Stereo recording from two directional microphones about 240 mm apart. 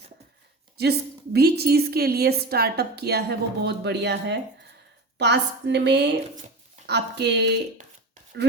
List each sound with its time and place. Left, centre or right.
0.8 s a woman's voice: right